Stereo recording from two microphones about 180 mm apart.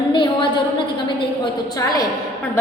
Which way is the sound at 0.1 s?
25° left (ahead or behind).